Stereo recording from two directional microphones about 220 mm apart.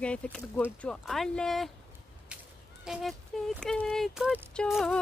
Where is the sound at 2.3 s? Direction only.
5° right (ahead or behind).